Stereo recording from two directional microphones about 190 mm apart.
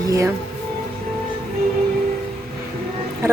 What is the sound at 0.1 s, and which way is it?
Speech, 15° right (ahead or behind).